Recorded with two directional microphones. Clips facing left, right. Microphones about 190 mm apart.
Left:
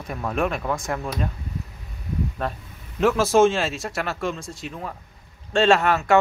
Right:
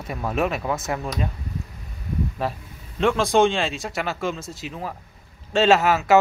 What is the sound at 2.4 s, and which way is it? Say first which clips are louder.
Speech: right 1 dB; centre (ahead or behind).